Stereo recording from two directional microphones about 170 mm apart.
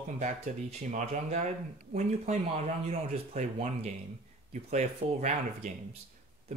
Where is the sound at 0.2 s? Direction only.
45° right (ahead or behind).